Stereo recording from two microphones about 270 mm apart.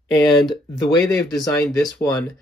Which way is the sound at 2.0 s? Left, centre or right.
Centre.